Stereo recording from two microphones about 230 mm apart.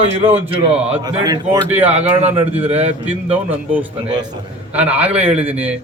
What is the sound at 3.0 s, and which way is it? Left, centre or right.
A man's voice, centre.